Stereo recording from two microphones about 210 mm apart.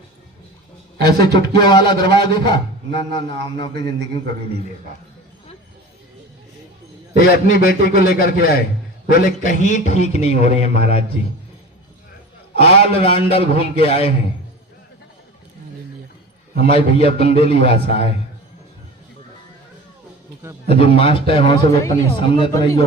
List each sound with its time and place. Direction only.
0.9 s a man's voice: 20° left (ahead or behind)
7.2 s a man's voice: 50° left (ahead or behind); by 11.0 s 30° left (ahead or behind)
12.5 s a man's voice: 30° left (ahead or behind)
16.6 s a man's voice: 25° left (ahead or behind)
20.7 s a man's voice: 25° left (ahead or behind)